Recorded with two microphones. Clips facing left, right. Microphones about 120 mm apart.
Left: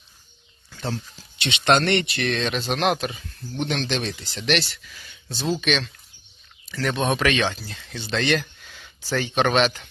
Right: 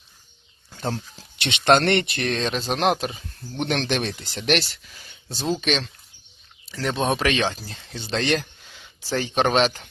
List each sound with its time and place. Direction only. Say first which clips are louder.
1.4 s speech: right 2 dB; 55° right (ahead or behind); by 3.6 s 30° right (ahead or behind)
3.6 s speech: right 2 dB; 50° right (ahead or behind); by 8.4 s 35° right (ahead or behind)
8.6 s speech: left 1 dB; 25° right (ahead or behind)